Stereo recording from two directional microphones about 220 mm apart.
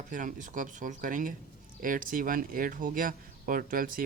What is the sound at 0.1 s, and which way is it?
Speech, 35° right (ahead or behind).